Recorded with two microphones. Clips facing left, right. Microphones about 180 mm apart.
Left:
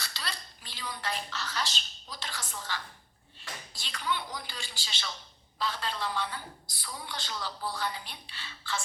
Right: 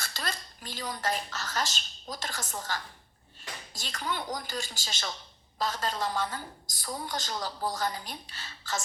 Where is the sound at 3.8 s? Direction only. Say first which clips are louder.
Even; 45° right (ahead or behind).